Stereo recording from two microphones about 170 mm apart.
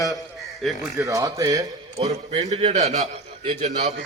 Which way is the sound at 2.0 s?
40° right (ahead or behind).